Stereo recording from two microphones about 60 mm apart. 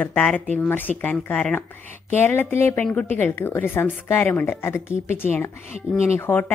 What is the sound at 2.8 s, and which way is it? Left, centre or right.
A woman's voice, left.